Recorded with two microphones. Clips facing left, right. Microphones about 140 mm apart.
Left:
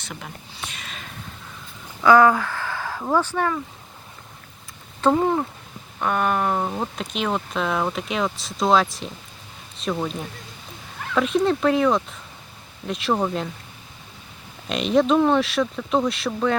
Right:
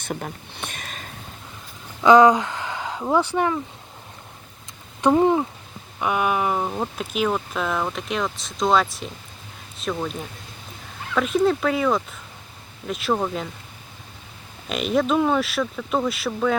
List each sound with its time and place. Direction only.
0.0 s a sound: 50° right (ahead or behind)
2.0 s a sound: 20° right (ahead or behind)
3.0 s speech: 10° right (ahead or behind)
4.9 s speech: 15° right (ahead or behind); by 10.1 s 5° left (ahead or behind)
11.1 s speech: centre (ahead or behind)
14.7 s speech: centre (ahead or behind)